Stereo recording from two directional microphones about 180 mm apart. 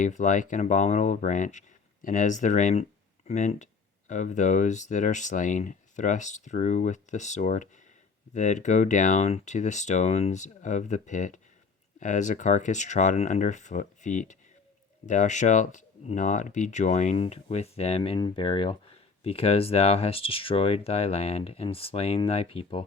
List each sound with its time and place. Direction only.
0.0 s speech: 45° left (ahead or behind)